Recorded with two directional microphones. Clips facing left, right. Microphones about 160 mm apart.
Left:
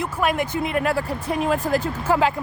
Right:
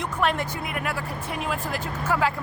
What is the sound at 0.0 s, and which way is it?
Speech, 10° left (ahead or behind).